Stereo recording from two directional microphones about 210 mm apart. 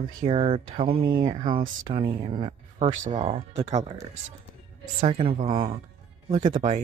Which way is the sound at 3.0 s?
35° right (ahead or behind).